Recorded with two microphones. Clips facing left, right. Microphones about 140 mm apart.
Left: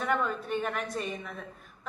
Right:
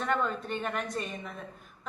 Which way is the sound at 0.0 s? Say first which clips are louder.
Even; 5° left (ahead or behind).